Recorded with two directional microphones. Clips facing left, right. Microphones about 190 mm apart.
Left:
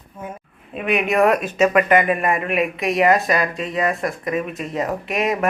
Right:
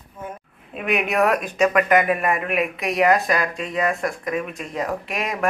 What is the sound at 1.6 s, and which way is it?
Speech, 5° left (ahead or behind).